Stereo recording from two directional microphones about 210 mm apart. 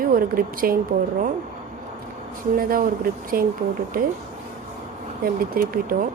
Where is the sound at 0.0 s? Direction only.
45° right (ahead or behind).